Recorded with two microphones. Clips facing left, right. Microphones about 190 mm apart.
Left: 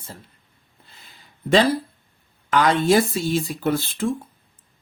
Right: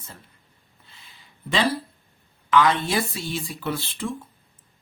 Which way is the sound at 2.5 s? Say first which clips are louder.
Left 3 dB; 45° left (ahead or behind).